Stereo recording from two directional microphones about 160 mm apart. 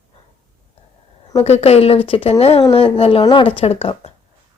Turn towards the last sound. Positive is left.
turn(degrees=35)  # may be behind; listen again after turning